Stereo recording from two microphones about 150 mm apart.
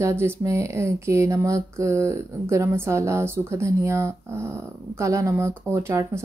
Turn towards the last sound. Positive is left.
turn(degrees=-20)  # may be behind; listen again after turning